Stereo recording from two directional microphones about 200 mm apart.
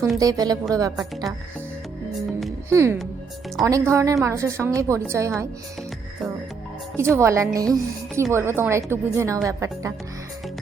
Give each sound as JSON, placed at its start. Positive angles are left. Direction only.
{"t": 0.2, "sound": "a woman's voice", "side_deg": -20}
{"t": 2.6, "sound": "a woman's voice", "side_deg": -15}
{"t": 6.9, "sound": "a woman's voice", "side_deg": -15}